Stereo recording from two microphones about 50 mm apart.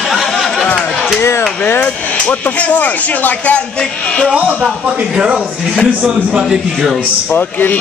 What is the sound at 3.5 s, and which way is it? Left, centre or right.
Speech, centre.